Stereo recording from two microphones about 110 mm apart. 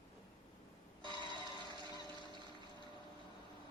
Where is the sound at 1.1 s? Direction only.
40° left (ahead or behind).